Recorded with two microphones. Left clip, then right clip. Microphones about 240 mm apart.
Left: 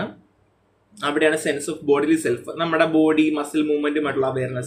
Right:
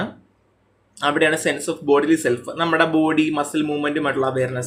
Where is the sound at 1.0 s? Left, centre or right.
Centre.